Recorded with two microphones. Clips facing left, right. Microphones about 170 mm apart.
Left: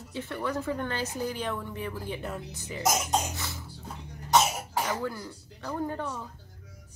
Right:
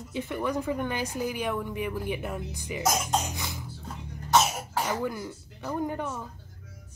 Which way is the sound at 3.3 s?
15° right (ahead or behind).